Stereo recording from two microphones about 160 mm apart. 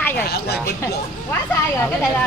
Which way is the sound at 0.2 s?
85° left.